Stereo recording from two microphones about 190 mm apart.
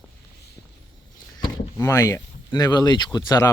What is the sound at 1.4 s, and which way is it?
Speech, 20° left (ahead or behind).